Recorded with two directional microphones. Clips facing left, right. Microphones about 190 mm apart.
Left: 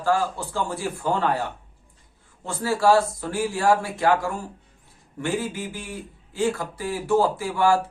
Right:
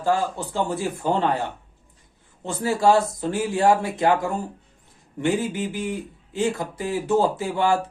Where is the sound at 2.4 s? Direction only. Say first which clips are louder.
Right 1 dB; 20° right (ahead or behind).